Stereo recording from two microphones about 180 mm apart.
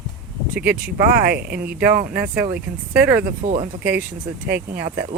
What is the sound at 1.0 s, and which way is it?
Speech, 60° right (ahead or behind).